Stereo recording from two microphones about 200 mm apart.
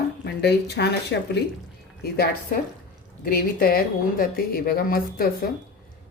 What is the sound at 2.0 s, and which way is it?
Speech, 50° left (ahead or behind).